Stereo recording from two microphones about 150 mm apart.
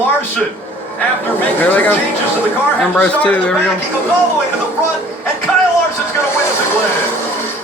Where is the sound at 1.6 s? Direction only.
10° left (ahead or behind).